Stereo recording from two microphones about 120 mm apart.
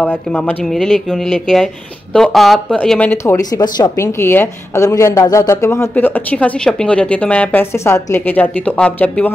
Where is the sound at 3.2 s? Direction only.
25° left (ahead or behind).